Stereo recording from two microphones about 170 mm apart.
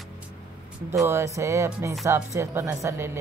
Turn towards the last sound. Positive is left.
turn(degrees=-15)  # may be behind; listen again after turning